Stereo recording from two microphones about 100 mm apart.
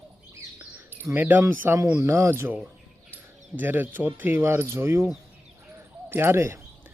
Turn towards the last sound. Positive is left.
turn(degrees=-25)  # may be behind; listen again after turning